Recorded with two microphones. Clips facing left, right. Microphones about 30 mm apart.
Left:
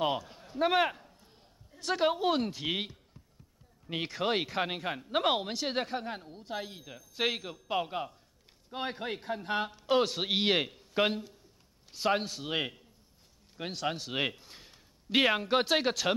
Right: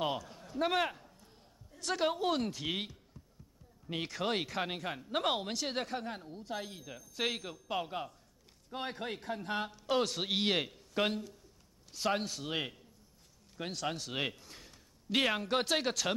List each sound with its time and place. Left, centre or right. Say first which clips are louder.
0.0 s a man's voice: left 4 dB; centre